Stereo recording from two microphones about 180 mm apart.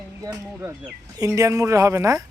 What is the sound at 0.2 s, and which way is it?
Speech, 20° right (ahead or behind).